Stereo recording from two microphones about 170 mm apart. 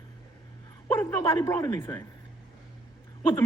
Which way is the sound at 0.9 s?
15° left (ahead or behind).